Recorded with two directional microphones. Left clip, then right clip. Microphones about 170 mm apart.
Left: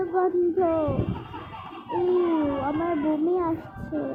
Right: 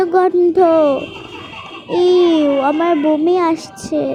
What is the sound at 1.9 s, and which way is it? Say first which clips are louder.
A child's voice: right 12 dB; 50° right (ahead or behind).